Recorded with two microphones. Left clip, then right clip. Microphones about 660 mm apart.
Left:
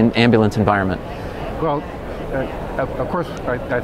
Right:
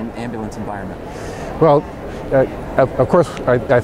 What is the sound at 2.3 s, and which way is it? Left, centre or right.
Speech, right.